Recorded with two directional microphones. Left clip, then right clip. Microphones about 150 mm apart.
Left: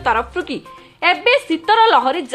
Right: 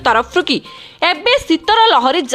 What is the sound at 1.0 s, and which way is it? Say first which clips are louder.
Speech: right 1 dB; 30° right (ahead or behind).